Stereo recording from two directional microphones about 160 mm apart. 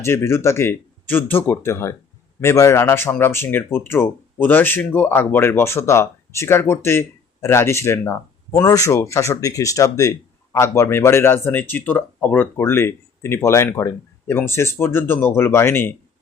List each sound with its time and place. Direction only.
0.0 s speech: 15° left (ahead or behind)